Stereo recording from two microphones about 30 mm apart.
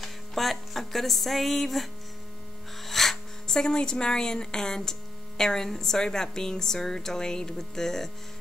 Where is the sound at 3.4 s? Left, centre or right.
Left.